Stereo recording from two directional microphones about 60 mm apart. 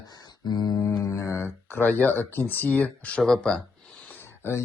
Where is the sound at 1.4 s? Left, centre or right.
Left; by 3.6 s centre.